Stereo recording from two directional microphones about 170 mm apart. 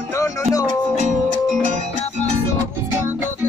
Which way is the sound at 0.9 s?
45° right (ahead or behind).